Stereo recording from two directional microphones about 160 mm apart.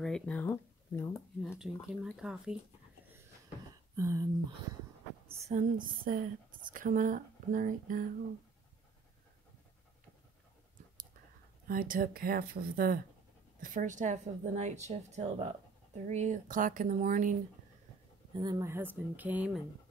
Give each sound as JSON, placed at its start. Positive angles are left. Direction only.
{"t": 0.0, "sound": "speech", "side_deg": 5}
{"t": 1.1, "sound": "speech", "side_deg": 0}
{"t": 3.9, "sound": "speech", "side_deg": -20}
{"t": 5.3, "sound": "a woman's voice", "side_deg": -45}
{"t": 11.6, "sound": "speech", "side_deg": -60}
{"t": 13.6, "sound": "a woman's voice", "side_deg": -55}
{"t": 18.3, "sound": "speech", "side_deg": -25}